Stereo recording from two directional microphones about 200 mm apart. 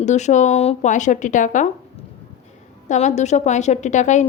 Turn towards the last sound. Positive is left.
turn(degrees=35)  # may be behind; listen again after turning